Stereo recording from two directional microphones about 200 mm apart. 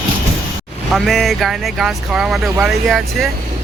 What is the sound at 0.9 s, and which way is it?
Speech, centre (ahead or behind).